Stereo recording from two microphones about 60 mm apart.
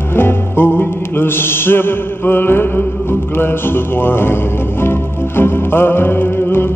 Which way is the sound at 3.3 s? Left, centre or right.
Left.